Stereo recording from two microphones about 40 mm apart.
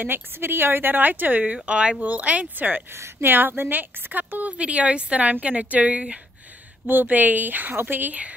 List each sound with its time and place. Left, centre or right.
0.0 s a woman's voice: right
1.4 s a woman's voice: right
3.0 s a woman's voice: right
4.6 s a woman's voice: right
6.9 s a woman's voice: right